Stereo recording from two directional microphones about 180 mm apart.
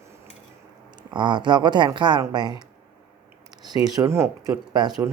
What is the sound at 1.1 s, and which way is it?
Speech, 25° right (ahead or behind).